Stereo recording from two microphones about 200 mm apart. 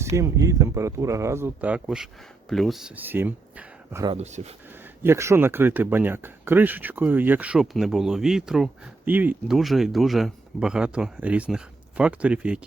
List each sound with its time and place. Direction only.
0.0 s speech: 15° right (ahead or behind)
4.0 s speech: 30° right (ahead or behind)
5.0 s speech: 15° right (ahead or behind)